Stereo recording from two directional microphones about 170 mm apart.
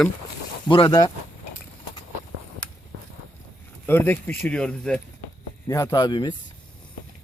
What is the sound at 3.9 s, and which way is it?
Speech, 10° left (ahead or behind).